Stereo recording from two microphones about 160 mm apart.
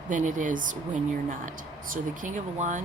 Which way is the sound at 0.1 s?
50° right (ahead or behind).